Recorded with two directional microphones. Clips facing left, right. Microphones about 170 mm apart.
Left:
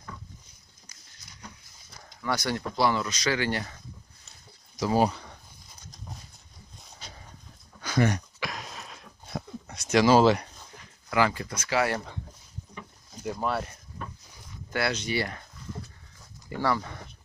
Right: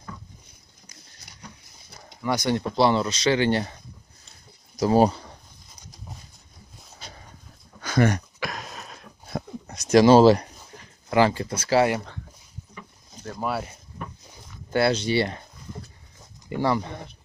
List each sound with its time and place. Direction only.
2.2 s speech: 20° right (ahead or behind)
4.7 s speech: 40° right (ahead or behind)
7.8 s a sound: 50° right (ahead or behind); by 10.5 s 35° right (ahead or behind)
10.8 s speech: 30° right (ahead or behind)
13.4 s speech: 5° right (ahead or behind)
14.7 s speech: 30° right (ahead or behind)
16.2 s dog: 20° right (ahead or behind)